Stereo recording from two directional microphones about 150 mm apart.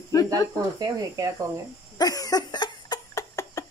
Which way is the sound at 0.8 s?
25° right (ahead or behind).